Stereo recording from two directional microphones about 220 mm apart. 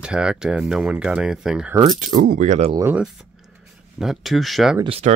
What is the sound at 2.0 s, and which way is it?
Speech, 40° right (ahead or behind).